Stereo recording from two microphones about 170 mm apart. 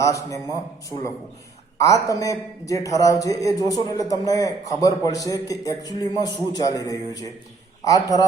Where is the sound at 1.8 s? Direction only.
20° left (ahead or behind).